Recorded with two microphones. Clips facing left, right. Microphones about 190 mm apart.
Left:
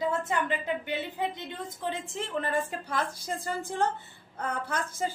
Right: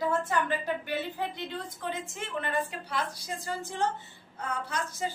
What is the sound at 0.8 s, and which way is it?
Speech, 20° left (ahead or behind).